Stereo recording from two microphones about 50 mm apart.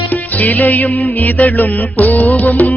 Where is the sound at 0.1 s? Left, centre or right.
Left.